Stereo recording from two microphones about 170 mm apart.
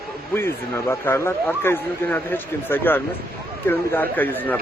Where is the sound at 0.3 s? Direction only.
15° left (ahead or behind).